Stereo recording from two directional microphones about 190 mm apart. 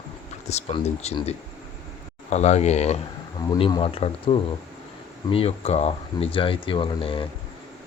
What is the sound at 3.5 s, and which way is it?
Speech, 25° left (ahead or behind).